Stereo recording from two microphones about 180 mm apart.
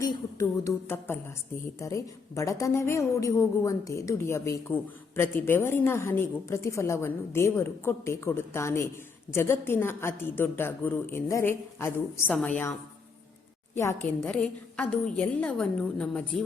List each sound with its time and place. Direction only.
0.0 s a woman's voice: 20° left (ahead or behind)
14.0 s a woman's voice: 10° left (ahead or behind)